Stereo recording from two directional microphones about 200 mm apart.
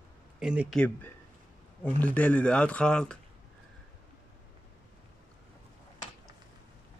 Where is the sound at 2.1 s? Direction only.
5° left (ahead or behind).